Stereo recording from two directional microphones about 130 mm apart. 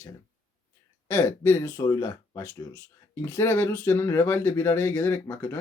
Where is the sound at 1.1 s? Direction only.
20° left (ahead or behind).